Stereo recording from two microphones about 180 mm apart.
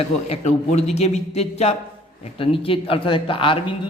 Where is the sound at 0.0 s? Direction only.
35° left (ahead or behind).